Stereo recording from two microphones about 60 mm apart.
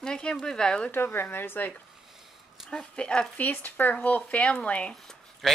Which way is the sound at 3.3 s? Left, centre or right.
Left.